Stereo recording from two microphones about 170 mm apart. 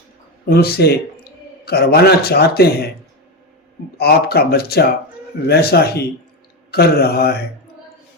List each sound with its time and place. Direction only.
0.4 s a man's voice: 65° left (ahead or behind)
4.0 s speech: 65° left (ahead or behind)